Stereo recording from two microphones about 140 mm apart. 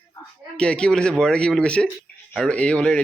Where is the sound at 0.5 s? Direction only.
5° left (ahead or behind).